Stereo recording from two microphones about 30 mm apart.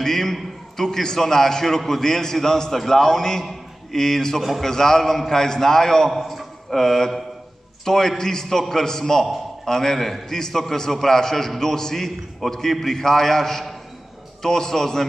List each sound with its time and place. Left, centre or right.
0.0 s a man's voice: centre
6.0 s a man's voice: centre